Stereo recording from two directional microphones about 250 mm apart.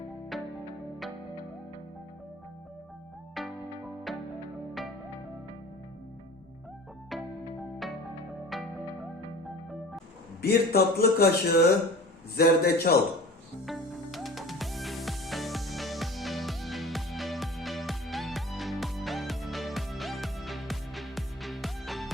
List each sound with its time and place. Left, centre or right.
0.3 s music: centre
3.4 s music: centre
4.8 s music: centre
7.8 s music: centre
10.4 s a man's voice: left
13.7 s music: centre